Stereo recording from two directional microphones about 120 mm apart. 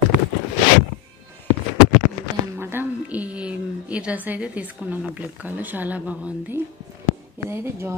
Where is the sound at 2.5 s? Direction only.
20° right (ahead or behind).